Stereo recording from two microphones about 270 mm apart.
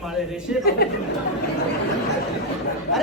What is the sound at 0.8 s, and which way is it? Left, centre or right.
Speech, left.